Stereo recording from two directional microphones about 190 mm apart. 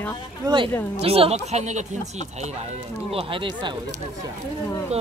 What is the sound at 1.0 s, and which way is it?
Speech, 30° right (ahead or behind).